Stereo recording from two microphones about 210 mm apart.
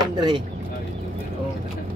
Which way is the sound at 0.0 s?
20° right (ahead or behind).